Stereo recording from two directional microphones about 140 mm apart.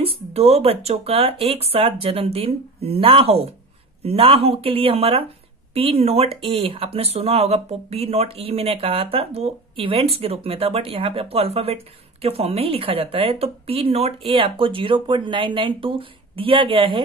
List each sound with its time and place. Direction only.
0.0 s speech: 45° right (ahead or behind)